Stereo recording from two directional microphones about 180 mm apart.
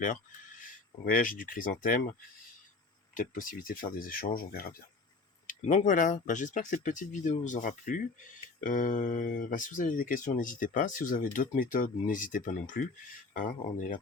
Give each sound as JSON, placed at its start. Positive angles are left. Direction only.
{"t": 0.6, "sound": "speech", "side_deg": 50}
{"t": 3.2, "sound": "speech", "side_deg": 50}
{"t": 5.5, "sound": "speech", "side_deg": 45}